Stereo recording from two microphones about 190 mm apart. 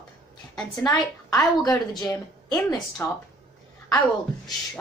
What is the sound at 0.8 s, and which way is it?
A woman's voice, 20° left (ahead or behind).